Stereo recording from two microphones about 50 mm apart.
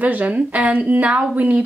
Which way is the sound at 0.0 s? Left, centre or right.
Right.